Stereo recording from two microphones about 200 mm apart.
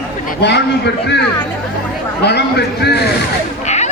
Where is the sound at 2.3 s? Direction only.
55° left (ahead or behind).